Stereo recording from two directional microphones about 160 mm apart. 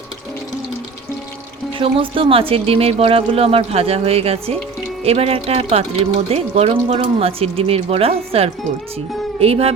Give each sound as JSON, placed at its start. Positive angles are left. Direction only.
{"t": 1.8, "sound": "speech", "side_deg": -35}